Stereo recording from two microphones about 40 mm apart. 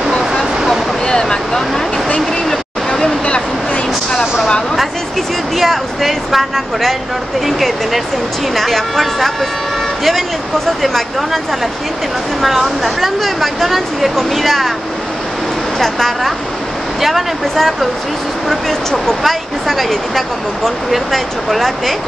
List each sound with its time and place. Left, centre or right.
1.0 s a sound: centre
5.6 s a sound: centre
7.4 s speech: centre
10.8 s speech: centre
12.4 s speech: centre
17.0 s speech: centre
18.5 s speech: centre